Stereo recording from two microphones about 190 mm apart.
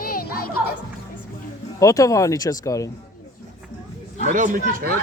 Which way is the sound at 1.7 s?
15° left (ahead or behind).